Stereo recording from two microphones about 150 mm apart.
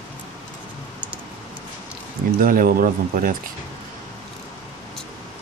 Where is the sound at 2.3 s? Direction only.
70° right (ahead or behind).